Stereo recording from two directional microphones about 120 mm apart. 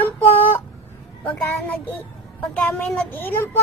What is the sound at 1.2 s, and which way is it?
Speech, 15° left (ahead or behind).